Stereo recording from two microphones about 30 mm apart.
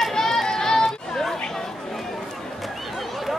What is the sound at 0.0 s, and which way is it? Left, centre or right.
Music, centre.